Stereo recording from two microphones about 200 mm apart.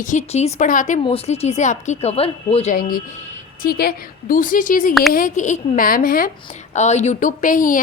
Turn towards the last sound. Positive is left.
turn(degrees=40)  # may be behind; listen again after turning